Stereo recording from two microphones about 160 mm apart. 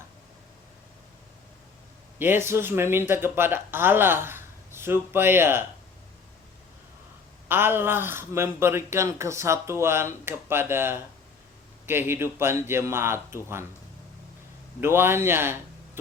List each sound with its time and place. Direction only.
2.1 s speech: 15° right (ahead or behind)
7.4 s speech: 15° right (ahead or behind)
14.8 s speech: 15° right (ahead or behind)